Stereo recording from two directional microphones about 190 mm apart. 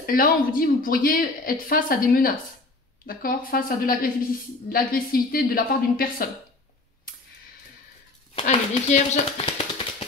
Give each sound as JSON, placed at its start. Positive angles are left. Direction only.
{"t": 0.0, "sound": "speech", "side_deg": 50}
{"t": 8.4, "sound": "speech", "side_deg": 35}